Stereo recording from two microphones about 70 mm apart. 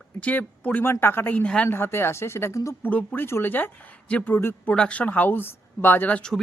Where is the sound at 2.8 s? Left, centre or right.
Left.